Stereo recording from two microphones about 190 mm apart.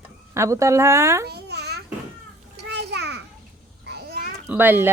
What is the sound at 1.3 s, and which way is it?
Babbling, 60° right (ahead or behind).